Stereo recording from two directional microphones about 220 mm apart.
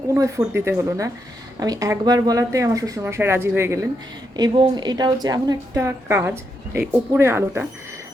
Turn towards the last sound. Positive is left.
turn(degrees=-10)  # may be behind; listen again after turning